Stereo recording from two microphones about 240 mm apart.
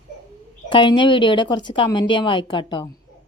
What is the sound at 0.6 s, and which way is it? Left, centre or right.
Speech, left.